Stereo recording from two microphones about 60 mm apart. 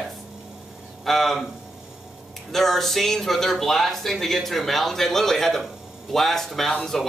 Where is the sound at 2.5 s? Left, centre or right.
Centre.